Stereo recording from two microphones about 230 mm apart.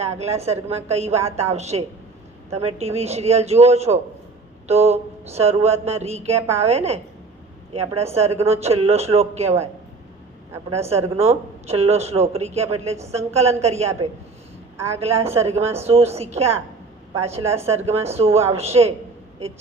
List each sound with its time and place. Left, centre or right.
0.2 s speech: right
10.8 s speech: right
14.8 s a woman's voice: centre
15.0 s speech: right